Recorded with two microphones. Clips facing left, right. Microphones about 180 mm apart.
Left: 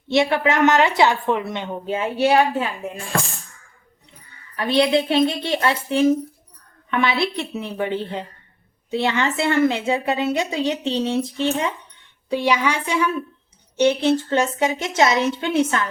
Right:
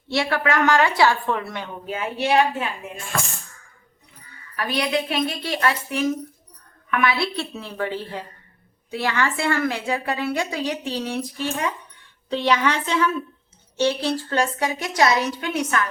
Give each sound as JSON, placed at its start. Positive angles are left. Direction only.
{"t": 0.1, "sound": "a woman's voice", "side_deg": 20}
{"t": 4.5, "sound": "a woman's voice", "side_deg": 25}
{"t": 12.3, "sound": "a woman's voice", "side_deg": 10}